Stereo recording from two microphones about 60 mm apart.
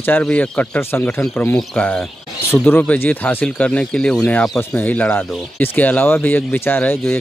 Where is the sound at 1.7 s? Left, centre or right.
Left.